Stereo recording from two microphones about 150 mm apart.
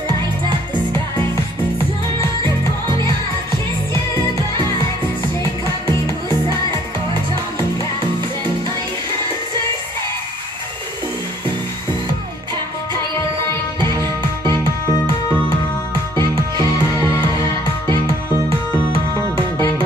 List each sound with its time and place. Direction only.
14.5 s music: 20° left (ahead or behind)